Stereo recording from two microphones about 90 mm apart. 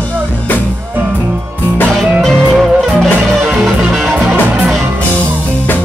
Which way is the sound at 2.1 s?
Centre (ahead or behind).